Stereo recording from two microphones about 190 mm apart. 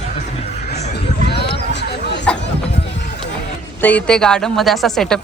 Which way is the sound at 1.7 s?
65° left (ahead or behind).